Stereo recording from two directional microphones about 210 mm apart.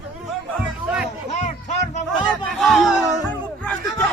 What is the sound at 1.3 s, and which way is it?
Music, 35° left (ahead or behind).